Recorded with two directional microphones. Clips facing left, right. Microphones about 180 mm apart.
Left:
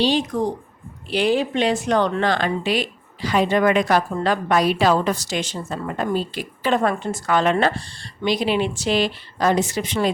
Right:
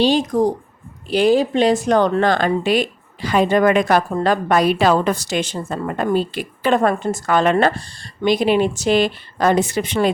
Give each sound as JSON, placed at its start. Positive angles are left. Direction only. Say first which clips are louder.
{"t": 0.0, "sound": "speech", "louder": "right 4 dB", "side_deg": -45}